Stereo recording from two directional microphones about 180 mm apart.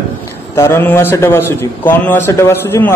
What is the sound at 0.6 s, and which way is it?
A man's voice, 15° left (ahead or behind).